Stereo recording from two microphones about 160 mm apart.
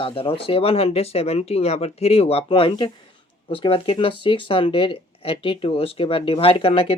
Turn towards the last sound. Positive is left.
turn(degrees=35)  # may be behind; listen again after turning